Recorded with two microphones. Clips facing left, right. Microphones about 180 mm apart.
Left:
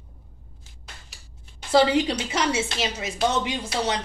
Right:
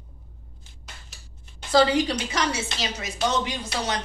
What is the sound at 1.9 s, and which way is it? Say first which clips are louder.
A woman's voice: left 1 dB; 25° left (ahead or behind).